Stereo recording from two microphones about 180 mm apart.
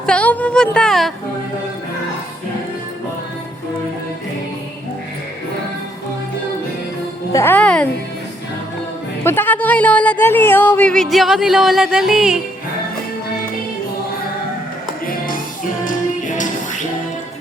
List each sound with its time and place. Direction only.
0.0 s speech: 5° left (ahead or behind)
7.3 s speech: 10° left (ahead or behind)
9.2 s speech: 10° left (ahead or behind)
15.8 s music: 45° left (ahead or behind)